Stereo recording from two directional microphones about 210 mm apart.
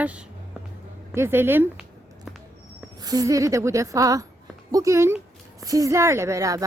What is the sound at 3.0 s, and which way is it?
Speech, 15° right (ahead or behind).